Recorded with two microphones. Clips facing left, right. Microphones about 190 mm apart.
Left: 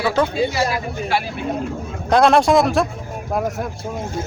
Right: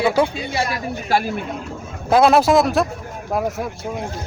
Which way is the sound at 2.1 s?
5° right (ahead or behind).